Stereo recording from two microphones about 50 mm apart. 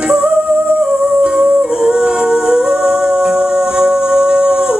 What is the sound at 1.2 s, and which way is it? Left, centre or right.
Humming, centre.